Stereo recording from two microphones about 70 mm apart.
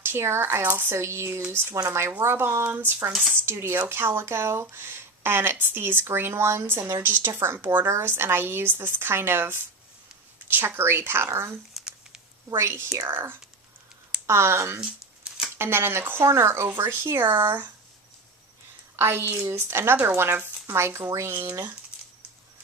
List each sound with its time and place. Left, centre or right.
0.0 s a woman's voice: right
0.9 s a woman's voice: right
1.7 s a woman's voice: right
3.1 s speech: centre
3.4 s a woman's voice: right
11.7 s a sound: centre
12.5 s a woman's voice: right
14.8 s shuffling cards: centre
15.5 s a woman's voice: right
18.9 s a woman's voice: right